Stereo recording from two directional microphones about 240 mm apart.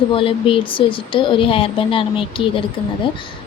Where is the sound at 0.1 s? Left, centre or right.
Left.